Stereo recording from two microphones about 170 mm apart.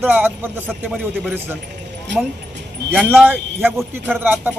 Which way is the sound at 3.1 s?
10° right (ahead or behind).